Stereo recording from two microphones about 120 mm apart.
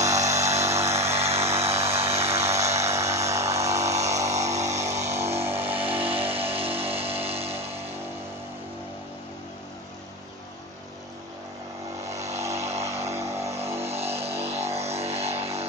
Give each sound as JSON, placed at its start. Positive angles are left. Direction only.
{"t": 0.0, "sound": "music", "side_deg": -25}
{"t": 0.9, "sound": "vehicle", "side_deg": -60}
{"t": 1.5, "sound": "vehicle", "side_deg": -20}
{"t": 4.0, "sound": "a sound", "side_deg": -25}
{"t": 4.6, "sound": "a sound", "side_deg": -70}
{"t": 5.0, "sound": "music", "side_deg": -20}
{"t": 5.7, "sound": "vehicle", "side_deg": -50}
{"t": 12.0, "sound": "vehicle", "side_deg": -25}
{"t": 13.8, "sound": "vehicle", "side_deg": -60}